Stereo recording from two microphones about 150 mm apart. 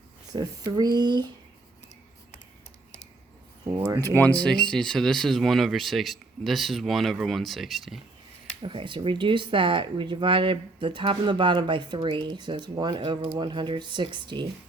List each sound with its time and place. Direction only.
0.3 s speech: 25° right (ahead or behind)
3.8 s speech: 15° right (ahead or behind)
4.0 s speech: 10° left (ahead or behind)
8.6 s speech: 35° right (ahead or behind)